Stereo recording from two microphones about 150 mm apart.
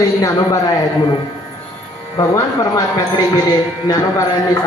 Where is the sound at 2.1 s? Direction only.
25° left (ahead or behind).